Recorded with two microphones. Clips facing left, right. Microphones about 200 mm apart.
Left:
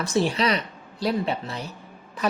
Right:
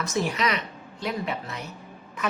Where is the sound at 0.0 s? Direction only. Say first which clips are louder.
Left 3 dB; 30° left (ahead or behind).